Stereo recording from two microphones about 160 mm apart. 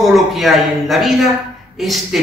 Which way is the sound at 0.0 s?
Centre (ahead or behind).